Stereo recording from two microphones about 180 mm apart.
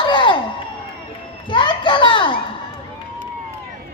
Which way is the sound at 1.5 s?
25° left (ahead or behind).